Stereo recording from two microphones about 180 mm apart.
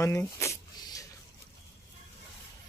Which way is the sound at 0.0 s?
15° left (ahead or behind).